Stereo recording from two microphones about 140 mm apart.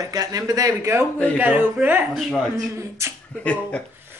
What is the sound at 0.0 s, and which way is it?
Speech, 25° right (ahead or behind).